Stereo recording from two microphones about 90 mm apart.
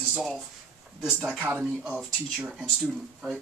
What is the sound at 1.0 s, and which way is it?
Speech, 5° right (ahead or behind).